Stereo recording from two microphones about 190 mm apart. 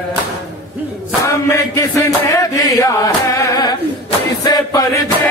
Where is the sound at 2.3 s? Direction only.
20° left (ahead or behind).